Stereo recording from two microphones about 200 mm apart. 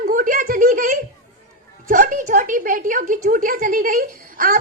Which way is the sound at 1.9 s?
45° right (ahead or behind).